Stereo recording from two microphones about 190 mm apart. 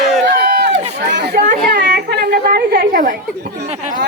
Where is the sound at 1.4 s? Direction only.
40° right (ahead or behind).